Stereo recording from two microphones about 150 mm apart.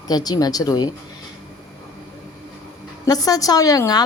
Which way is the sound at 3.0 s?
25° left (ahead or behind).